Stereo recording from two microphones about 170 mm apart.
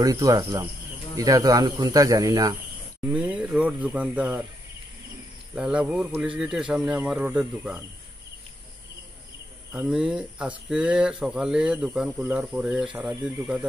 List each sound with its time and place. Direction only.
0.0 s speech: 20° right (ahead or behind)
3.1 s a sound: 5° right (ahead or behind)
5.5 s speech: 5° right (ahead or behind)
9.7 s speech: 5° right (ahead or behind)